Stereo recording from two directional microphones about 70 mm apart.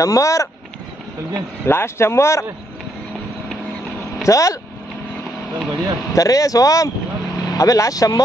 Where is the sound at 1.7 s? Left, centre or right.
Left.